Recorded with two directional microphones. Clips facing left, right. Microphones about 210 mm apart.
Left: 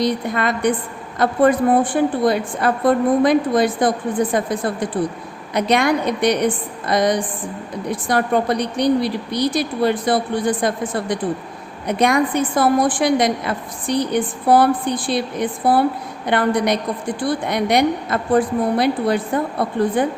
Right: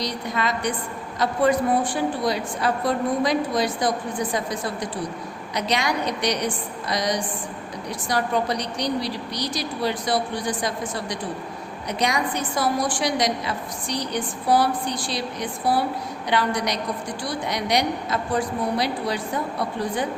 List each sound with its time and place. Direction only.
0.0 s a woman's voice: 55° left (ahead or behind)